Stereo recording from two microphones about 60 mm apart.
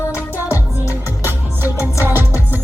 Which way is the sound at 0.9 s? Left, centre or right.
Right.